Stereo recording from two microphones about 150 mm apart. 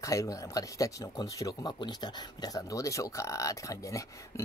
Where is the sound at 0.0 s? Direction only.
20° left (ahead or behind).